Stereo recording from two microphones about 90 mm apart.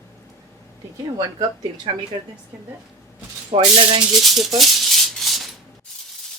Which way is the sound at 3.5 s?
75° right (ahead or behind).